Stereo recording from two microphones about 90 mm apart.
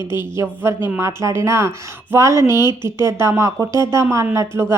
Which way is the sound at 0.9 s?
30° right (ahead or behind).